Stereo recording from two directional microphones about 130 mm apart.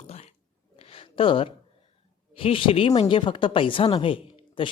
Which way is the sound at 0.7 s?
45° left (ahead or behind).